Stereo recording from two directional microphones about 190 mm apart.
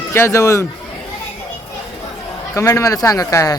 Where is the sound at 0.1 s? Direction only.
15° left (ahead or behind).